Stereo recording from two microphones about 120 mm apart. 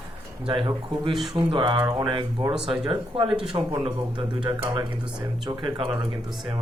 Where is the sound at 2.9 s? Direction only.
45° right (ahead or behind).